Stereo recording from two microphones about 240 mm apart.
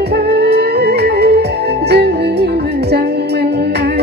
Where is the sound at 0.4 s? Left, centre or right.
Right.